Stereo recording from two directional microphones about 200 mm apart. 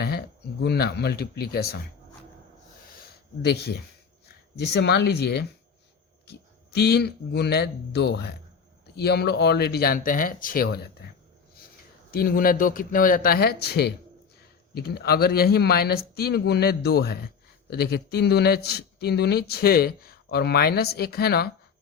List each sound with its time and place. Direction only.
0.0 s speech: 50° left (ahead or behind)
3.4 s a man's voice: 55° left (ahead or behind)
6.7 s a man's voice: 55° left (ahead or behind)
12.1 s speech: 45° left (ahead or behind)